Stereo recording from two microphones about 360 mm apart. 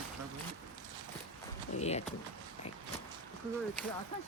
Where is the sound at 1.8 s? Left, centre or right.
Centre.